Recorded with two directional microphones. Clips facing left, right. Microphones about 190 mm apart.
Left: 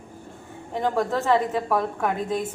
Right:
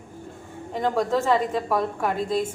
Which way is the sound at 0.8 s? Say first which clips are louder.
Right 1 dB; 5° left (ahead or behind).